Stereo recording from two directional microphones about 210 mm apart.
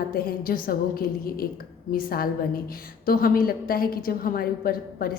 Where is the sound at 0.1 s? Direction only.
45° left (ahead or behind).